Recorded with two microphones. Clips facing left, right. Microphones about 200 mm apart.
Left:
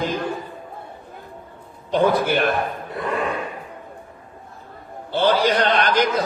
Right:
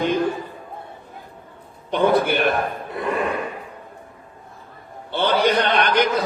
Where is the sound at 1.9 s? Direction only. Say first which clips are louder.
Even; 60° right (ahead or behind).